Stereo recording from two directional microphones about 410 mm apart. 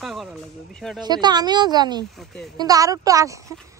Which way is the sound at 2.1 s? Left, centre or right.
Centre.